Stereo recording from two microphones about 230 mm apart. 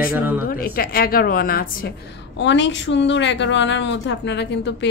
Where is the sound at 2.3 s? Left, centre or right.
Left.